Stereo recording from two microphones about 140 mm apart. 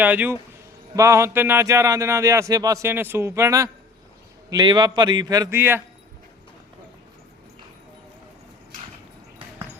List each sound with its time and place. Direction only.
0.0 s speech: 10° right (ahead or behind); by 5.5 s 25° right (ahead or behind)
5.5 s speech: 15° right (ahead or behind)